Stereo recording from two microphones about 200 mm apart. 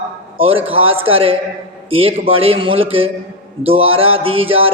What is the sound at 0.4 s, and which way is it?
Mantra, 30° right (ahead or behind).